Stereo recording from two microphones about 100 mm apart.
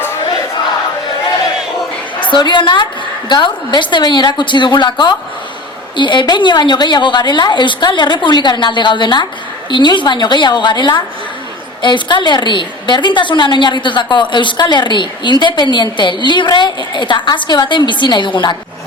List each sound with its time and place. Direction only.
2.2 s a woman's voice: 50° left (ahead or behind)